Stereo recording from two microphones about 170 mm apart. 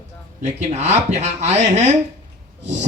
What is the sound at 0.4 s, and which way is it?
A man's voice, 40° right (ahead or behind).